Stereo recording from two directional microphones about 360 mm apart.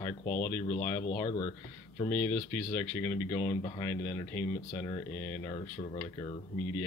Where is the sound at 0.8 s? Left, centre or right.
Centre.